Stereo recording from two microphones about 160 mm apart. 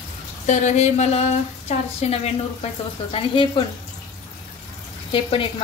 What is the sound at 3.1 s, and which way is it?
Speech, 35° left (ahead or behind).